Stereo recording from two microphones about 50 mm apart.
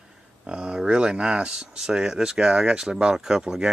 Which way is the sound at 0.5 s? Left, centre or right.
Centre.